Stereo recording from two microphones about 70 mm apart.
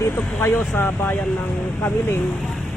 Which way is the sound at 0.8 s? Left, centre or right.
Left.